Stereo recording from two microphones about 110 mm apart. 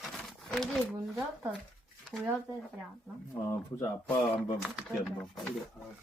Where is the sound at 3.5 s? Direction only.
25° left (ahead or behind).